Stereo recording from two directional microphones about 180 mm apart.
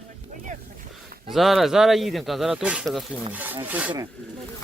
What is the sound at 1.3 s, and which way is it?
Speech, centre (ahead or behind).